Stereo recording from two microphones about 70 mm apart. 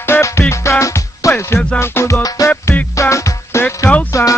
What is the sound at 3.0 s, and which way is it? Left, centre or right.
Music, left.